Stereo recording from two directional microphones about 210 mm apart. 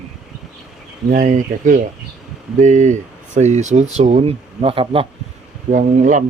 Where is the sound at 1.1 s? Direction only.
40° right (ahead or behind).